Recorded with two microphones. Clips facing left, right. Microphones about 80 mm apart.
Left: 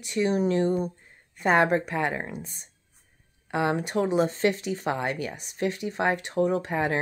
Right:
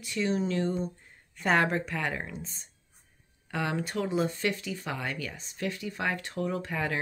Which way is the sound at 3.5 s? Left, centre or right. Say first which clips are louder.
Left 6 dB; left.